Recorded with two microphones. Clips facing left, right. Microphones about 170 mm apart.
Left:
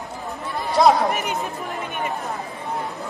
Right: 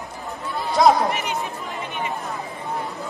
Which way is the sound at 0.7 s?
Centre (ahead or behind).